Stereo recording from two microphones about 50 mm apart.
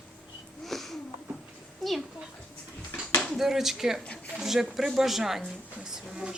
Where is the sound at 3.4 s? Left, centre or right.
Centre.